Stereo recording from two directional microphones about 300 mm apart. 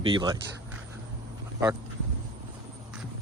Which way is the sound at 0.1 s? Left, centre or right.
Centre.